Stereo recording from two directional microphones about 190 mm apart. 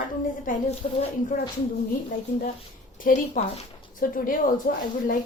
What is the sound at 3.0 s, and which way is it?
Speech, 45° left (ahead or behind).